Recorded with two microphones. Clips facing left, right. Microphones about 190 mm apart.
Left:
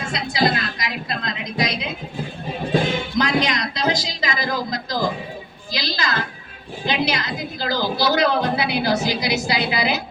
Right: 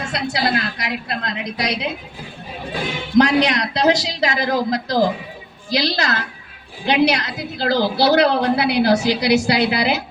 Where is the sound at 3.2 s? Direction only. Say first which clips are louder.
Right 7 dB; 70° right (ahead or behind).